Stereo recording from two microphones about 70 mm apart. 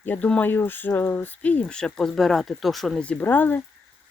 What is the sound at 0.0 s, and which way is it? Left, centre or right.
Speech, left.